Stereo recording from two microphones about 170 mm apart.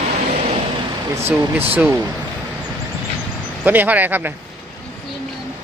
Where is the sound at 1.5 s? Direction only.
10° right (ahead or behind).